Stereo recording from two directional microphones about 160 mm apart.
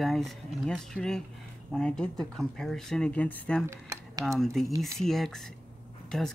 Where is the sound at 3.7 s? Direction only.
20° right (ahead or behind).